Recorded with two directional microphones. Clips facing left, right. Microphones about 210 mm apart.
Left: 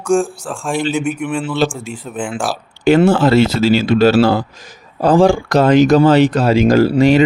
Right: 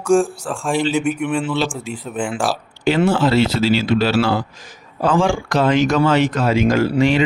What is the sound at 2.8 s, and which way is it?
Speech, 50° left (ahead or behind).